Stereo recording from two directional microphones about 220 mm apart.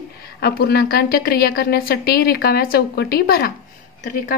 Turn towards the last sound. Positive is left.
turn(degrees=40)  # may be behind; listen again after turning